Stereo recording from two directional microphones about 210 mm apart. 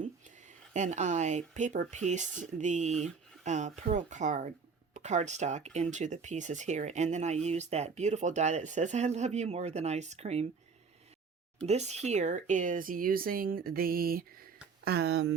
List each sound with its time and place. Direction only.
0.0 s speech: 35° right (ahead or behind)
11.6 s speech: 30° right (ahead or behind); by 15.4 s 55° right (ahead or behind)